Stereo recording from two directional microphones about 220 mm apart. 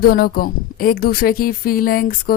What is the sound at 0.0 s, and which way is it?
Speech, 45° left (ahead or behind).